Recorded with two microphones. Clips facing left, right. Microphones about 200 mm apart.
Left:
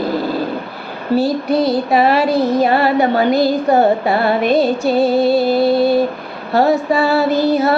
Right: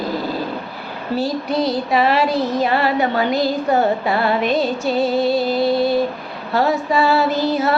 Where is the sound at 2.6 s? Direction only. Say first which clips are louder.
Left 4 dB; 40° left (ahead or behind).